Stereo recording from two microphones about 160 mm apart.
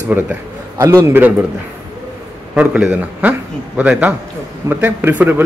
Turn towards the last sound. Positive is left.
turn(degrees=-10)  # may be behind; listen again after turning